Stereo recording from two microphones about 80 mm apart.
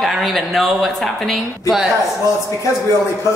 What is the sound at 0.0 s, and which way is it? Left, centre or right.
A woman's voice, centre.